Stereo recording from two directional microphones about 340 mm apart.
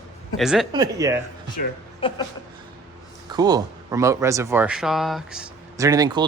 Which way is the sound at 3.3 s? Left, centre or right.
Centre.